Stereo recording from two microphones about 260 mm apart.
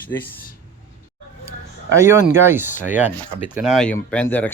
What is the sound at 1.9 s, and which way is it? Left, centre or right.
Speech, centre.